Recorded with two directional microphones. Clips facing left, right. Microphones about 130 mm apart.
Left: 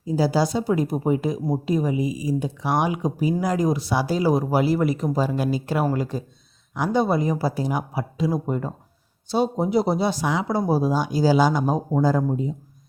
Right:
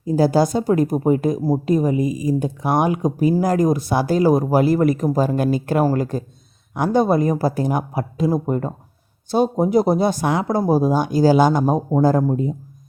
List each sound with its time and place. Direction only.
0.0 s speech: 50° right (ahead or behind)